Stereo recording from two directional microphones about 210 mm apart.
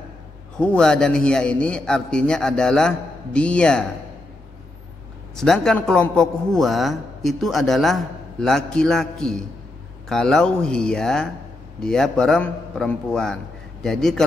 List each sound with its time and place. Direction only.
0.6 s a man's voice: 5° left (ahead or behind)
5.3 s a man's voice: centre (ahead or behind)